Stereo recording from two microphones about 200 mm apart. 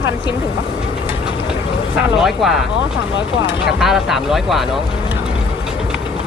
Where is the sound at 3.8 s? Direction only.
Centre (ahead or behind).